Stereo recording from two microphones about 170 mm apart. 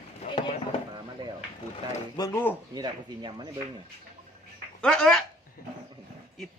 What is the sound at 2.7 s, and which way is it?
Speech, 25° right (ahead or behind).